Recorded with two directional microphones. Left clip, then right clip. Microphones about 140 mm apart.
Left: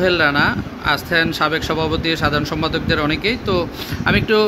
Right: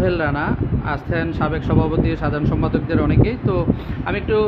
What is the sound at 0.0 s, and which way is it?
Speech, centre (ahead or behind).